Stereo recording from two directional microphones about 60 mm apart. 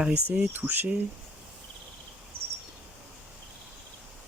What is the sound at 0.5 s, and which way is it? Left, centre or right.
Speech, right.